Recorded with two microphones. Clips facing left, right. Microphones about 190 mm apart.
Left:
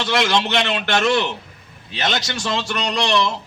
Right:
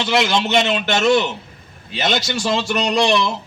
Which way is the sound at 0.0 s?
5° right (ahead or behind).